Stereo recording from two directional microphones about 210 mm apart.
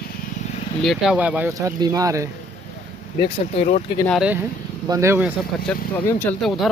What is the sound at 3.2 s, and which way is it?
Speech, 35° left (ahead or behind).